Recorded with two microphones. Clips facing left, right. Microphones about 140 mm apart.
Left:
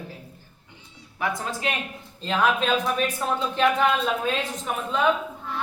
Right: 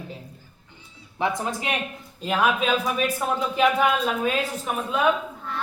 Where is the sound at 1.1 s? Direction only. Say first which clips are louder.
Right 3 dB; 20° right (ahead or behind).